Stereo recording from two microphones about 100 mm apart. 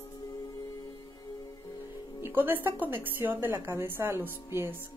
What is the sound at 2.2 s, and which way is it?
A woman's voice, 20° right (ahead or behind).